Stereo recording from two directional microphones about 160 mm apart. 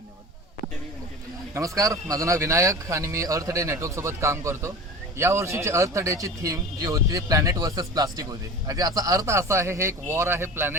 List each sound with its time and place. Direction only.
1.5 s a man's voice: 20° right (ahead or behind)